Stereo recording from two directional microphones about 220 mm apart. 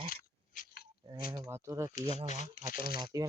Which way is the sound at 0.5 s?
45° left (ahead or behind).